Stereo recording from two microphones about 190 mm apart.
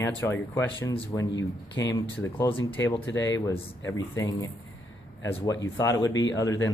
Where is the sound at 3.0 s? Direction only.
75° left (ahead or behind).